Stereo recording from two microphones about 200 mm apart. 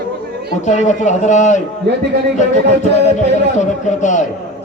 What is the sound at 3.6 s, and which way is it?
Speech, 40° left (ahead or behind).